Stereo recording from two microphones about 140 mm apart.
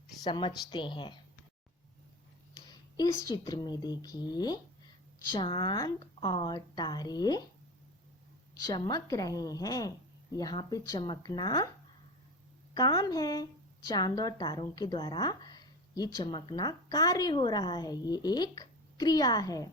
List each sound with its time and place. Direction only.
0.2 s a woman's voice: 35° left (ahead or behind)
2.6 s a woman's voice: 30° left (ahead or behind)
8.6 s a woman's voice: 25° left (ahead or behind)
12.7 s a woman's voice: 30° left (ahead or behind)